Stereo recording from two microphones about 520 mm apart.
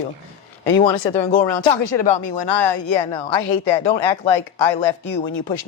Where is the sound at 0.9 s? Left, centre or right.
Left.